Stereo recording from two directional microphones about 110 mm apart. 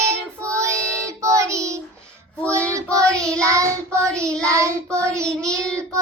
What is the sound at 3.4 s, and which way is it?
Child singing, 30° right (ahead or behind).